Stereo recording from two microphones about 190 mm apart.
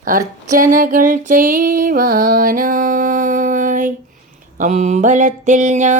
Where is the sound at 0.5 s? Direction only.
45° right (ahead or behind).